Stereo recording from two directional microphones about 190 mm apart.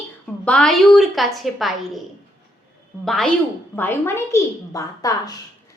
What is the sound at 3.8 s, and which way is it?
A child's voice, 10° left (ahead or behind).